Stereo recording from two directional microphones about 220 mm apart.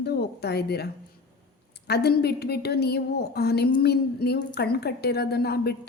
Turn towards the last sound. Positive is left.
turn(degrees=45)  # may be behind; listen again after turning